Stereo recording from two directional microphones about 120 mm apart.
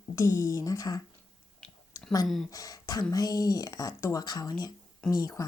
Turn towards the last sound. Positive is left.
turn(degrees=30)  # may be behind; listen again after turning